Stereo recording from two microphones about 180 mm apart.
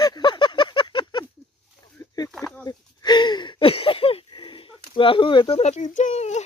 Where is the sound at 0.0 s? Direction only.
25° left (ahead or behind).